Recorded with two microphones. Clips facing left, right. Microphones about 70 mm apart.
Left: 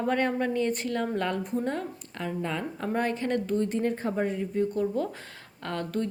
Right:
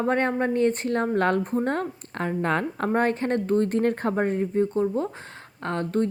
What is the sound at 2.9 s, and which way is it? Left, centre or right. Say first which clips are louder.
A woman's voice: right 4 dB; right.